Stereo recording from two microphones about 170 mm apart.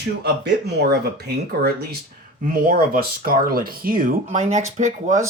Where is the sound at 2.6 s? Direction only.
60° right (ahead or behind).